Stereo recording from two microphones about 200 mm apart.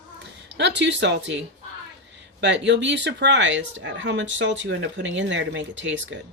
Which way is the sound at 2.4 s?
60° right (ahead or behind).